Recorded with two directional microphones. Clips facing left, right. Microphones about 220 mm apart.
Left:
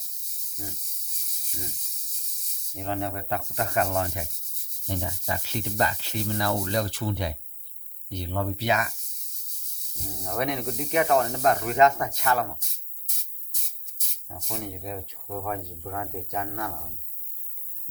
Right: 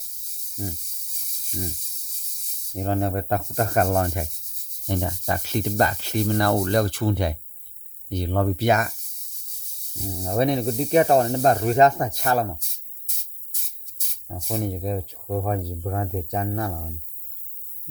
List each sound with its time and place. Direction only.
2.7 s sanding: 40° right (ahead or behind)
10.1 s speech: 30° right (ahead or behind)
14.4 s speech: 40° right (ahead or behind)